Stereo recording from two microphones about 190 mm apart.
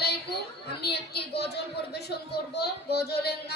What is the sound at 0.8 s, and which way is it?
A woman's voice, 60° left (ahead or behind).